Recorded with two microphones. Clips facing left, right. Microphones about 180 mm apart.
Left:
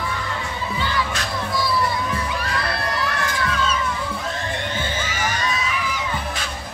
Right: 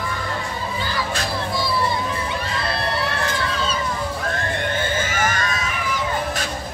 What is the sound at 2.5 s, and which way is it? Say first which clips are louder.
Crowd: right 2 dB; 30° right (ahead or behind).